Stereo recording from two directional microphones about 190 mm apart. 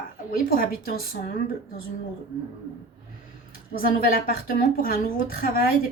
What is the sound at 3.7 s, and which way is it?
Speech, 50° left (ahead or behind).